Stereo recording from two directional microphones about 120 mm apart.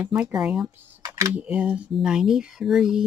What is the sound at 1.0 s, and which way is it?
Camera, 30° right (ahead or behind).